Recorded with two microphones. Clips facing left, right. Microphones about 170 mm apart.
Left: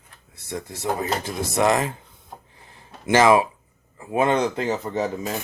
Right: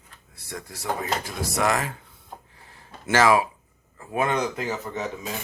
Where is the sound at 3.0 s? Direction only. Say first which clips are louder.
Left 3 dB; 20° left (ahead or behind).